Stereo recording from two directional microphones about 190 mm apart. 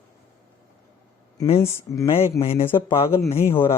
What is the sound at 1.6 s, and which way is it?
Speech, 15° left (ahead or behind).